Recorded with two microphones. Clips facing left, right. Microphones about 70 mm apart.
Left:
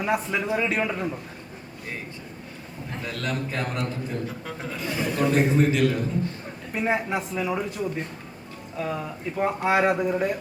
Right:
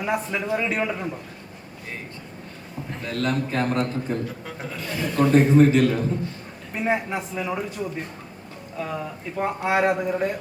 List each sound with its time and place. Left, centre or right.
0.0 s speech: centre
3.1 s a man's voice: right
4.8 s a man's voice: centre
5.1 s a man's voice: right
6.7 s speech: centre